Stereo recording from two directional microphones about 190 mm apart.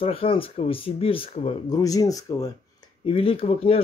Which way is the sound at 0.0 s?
30° left (ahead or behind).